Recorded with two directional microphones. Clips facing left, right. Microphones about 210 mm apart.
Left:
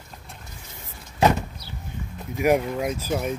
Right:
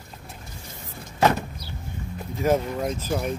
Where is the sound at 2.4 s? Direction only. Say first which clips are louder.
Left 2 dB; 15° left (ahead or behind).